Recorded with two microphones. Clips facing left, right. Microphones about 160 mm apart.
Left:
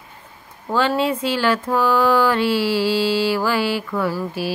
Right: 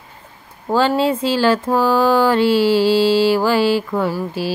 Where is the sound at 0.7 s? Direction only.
30° right (ahead or behind).